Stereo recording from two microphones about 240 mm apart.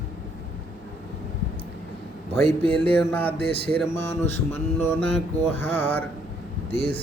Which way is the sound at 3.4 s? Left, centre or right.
Right.